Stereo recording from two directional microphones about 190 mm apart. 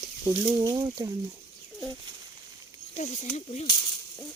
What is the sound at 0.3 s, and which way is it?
Speech, 20° right (ahead or behind).